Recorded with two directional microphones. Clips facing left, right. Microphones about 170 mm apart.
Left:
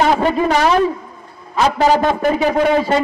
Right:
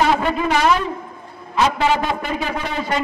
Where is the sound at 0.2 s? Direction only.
35° left (ahead or behind).